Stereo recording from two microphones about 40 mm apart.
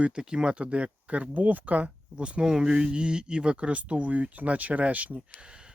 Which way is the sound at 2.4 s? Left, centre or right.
Centre.